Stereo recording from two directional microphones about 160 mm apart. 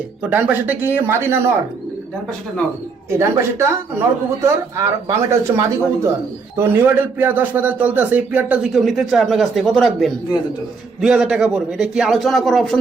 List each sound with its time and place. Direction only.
0.2 s speech: 10° right (ahead or behind)
3.1 s a man's voice: 15° right (ahead or behind); by 12.7 s centre (ahead or behind)